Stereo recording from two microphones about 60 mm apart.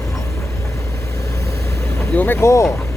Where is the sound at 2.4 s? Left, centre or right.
Left.